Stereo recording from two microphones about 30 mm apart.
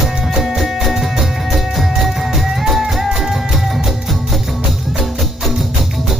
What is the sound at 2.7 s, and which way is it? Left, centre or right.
Music, centre.